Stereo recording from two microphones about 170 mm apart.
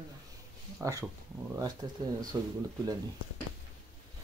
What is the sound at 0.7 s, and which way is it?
Speech, 20° right (ahead or behind).